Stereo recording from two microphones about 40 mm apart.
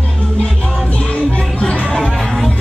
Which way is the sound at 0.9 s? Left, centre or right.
Left.